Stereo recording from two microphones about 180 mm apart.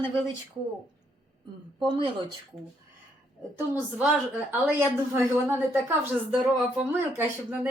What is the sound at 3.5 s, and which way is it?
A woman's voice, 10° right (ahead or behind).